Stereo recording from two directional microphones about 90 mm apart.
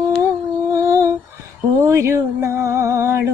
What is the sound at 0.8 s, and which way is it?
Lullaby, 35° right (ahead or behind).